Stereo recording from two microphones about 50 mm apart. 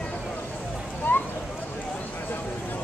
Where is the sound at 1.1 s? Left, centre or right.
Left.